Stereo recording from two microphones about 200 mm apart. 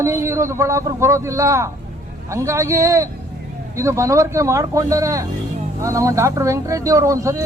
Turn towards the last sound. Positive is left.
turn(degrees=-15)  # may be behind; listen again after turning